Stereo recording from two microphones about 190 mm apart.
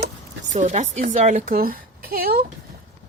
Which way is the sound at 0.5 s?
40° right (ahead or behind).